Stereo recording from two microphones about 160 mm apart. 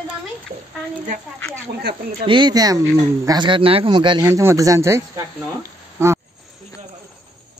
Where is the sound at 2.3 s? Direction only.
25° right (ahead or behind).